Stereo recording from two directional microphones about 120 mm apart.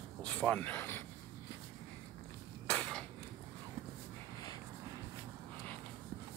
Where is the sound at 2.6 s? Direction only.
10° left (ahead or behind).